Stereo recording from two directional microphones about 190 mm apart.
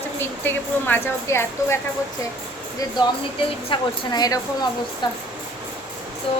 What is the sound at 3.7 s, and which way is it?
A woman's voice, 20° left (ahead or behind).